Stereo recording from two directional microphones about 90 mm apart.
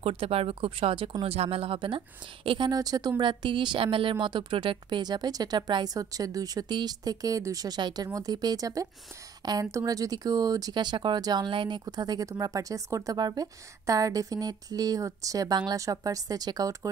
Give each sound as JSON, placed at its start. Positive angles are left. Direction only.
{"t": 0.0, "sound": "speech", "side_deg": -85}
{"t": 2.7, "sound": "speech", "side_deg": -45}
{"t": 3.3, "sound": "a woman's voice", "side_deg": -65}
{"t": 5.9, "sound": "a woman's voice", "side_deg": -40}
{"t": 9.7, "sound": "speech", "side_deg": -40}